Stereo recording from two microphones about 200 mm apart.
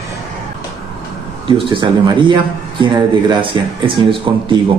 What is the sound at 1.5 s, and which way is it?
A man's voice, 25° right (ahead or behind).